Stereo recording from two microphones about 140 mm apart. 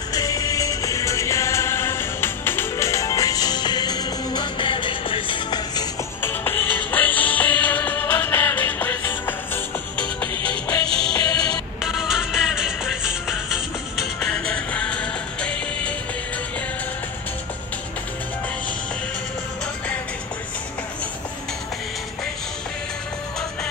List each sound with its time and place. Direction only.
0.1 s music: 25° left (ahead or behind)
6.2 s music: 15° left (ahead or behind)
10.3 s music: 35° right (ahead or behind)
11.8 s music: centre (ahead or behind)